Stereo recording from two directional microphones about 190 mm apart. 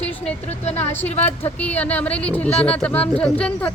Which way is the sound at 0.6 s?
35° left (ahead or behind).